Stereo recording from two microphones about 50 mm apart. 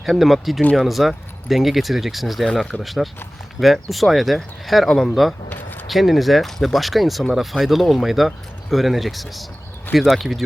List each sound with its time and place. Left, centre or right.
0.0 s speech: centre
5.5 s a sound: left
5.9 s speech: centre